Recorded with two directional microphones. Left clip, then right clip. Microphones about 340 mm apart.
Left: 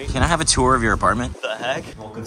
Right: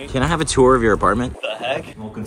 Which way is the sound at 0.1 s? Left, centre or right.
Centre.